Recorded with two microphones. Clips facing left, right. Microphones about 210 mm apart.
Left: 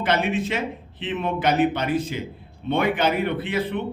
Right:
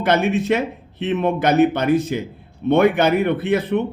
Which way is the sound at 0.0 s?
45° right (ahead or behind).